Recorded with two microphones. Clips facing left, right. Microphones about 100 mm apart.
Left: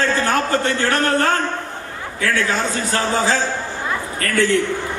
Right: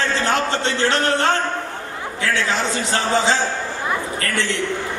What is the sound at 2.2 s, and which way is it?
Speech, 20° right (ahead or behind).